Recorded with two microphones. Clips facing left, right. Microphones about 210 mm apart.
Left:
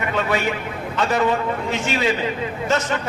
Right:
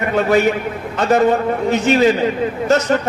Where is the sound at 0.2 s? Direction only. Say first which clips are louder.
Right 9 dB; 40° right (ahead or behind).